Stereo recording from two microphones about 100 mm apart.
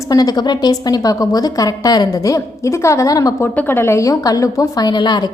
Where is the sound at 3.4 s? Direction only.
20° left (ahead or behind); by 5.3 s 50° left (ahead or behind).